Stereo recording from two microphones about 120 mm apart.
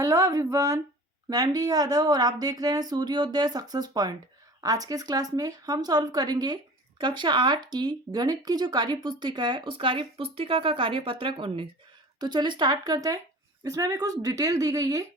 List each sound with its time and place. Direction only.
0.0 s a woman's voice: 25° right (ahead or behind); by 11.7 s 50° right (ahead or behind)
12.2 s a woman's voice: 40° right (ahead or behind)